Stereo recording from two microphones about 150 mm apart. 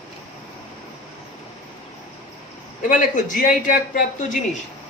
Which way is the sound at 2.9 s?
60° left (ahead or behind).